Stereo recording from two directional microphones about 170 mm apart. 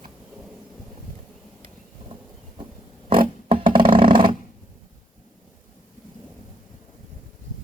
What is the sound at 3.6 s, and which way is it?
Roar, 55° right (ahead or behind).